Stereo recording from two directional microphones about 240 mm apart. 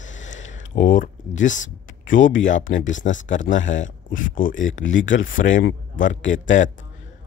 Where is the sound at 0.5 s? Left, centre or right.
Left.